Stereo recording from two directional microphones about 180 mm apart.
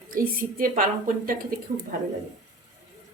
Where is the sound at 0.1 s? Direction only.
50° right (ahead or behind).